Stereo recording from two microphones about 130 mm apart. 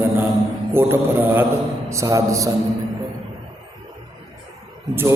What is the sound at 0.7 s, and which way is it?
Mantra, 20° right (ahead or behind).